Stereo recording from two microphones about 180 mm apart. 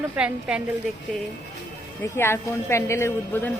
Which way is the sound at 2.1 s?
15° left (ahead or behind).